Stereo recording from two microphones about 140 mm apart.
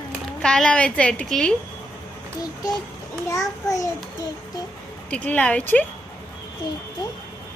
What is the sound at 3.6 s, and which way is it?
Speech, 25° left (ahead or behind).